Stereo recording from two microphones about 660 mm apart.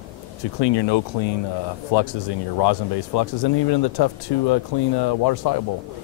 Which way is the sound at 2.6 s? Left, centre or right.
Left.